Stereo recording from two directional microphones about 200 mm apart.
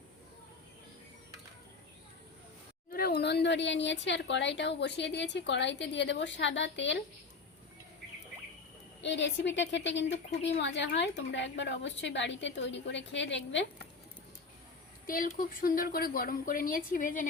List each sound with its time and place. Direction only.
2.9 s speech: 50° left (ahead or behind)
9.0 s speech: 60° left (ahead or behind)
15.0 s speech: 45° left (ahead or behind)